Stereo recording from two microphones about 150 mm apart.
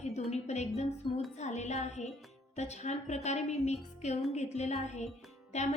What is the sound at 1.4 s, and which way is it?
A woman's voice, 50° left (ahead or behind).